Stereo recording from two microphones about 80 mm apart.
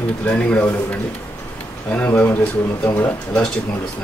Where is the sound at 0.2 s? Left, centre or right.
Centre.